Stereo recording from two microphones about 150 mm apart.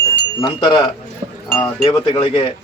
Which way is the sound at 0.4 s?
30° left (ahead or behind).